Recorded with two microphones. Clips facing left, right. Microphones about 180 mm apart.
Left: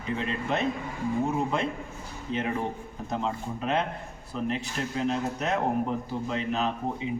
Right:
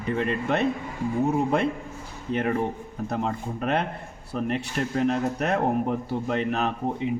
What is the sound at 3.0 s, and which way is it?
A man's voice, 55° right (ahead or behind).